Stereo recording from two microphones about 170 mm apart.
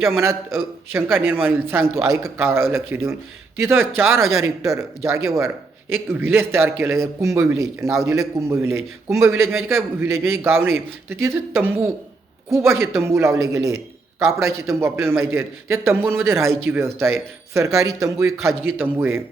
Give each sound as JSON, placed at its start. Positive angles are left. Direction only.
{"t": 0.0, "sound": "speech", "side_deg": -15}